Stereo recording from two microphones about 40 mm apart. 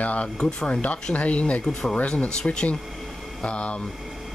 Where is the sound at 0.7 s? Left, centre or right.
Left.